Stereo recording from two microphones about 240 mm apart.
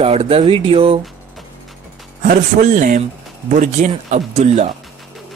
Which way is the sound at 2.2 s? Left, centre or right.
Right.